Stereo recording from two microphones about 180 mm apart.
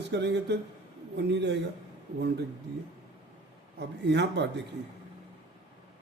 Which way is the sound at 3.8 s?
70° right (ahead or behind).